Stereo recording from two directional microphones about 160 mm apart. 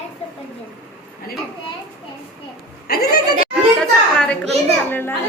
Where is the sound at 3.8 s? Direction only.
5° left (ahead or behind).